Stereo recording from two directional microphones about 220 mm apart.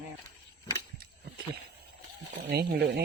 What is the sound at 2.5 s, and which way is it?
Speech, 45° right (ahead or behind).